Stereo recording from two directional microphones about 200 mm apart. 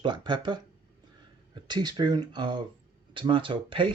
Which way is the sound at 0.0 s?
20° right (ahead or behind).